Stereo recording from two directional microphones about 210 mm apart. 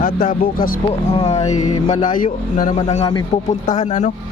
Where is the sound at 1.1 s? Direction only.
30° left (ahead or behind).